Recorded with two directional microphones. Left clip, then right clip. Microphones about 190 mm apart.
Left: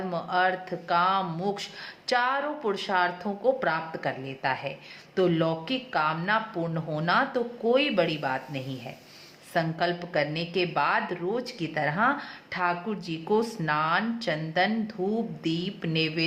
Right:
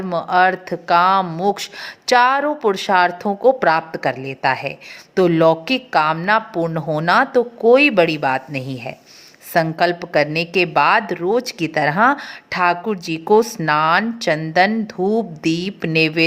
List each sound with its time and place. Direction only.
0.1 s a woman's voice: 45° right (ahead or behind)